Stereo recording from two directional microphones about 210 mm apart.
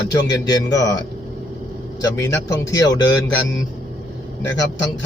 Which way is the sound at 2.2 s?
15° left (ahead or behind).